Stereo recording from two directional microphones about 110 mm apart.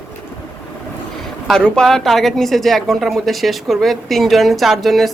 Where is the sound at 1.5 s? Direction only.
5° left (ahead or behind).